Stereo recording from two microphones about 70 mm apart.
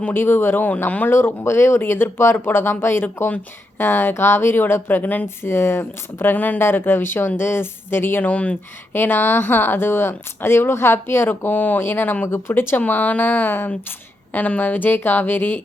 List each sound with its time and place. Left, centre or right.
0.0 s speech: left
1.1 s a woman's voice: left